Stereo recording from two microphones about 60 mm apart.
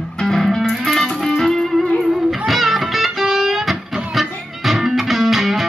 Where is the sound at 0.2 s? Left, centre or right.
Centre.